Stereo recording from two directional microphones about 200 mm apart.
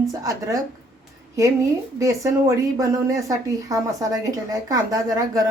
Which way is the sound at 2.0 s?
15° right (ahead or behind).